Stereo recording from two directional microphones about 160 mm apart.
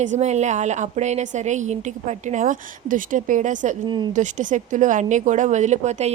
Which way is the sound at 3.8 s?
30° right (ahead or behind).